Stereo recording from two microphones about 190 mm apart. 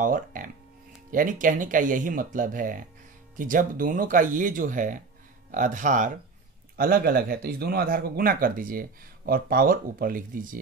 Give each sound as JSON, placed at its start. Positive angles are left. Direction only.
{"t": 0.0, "sound": "speech", "side_deg": -45}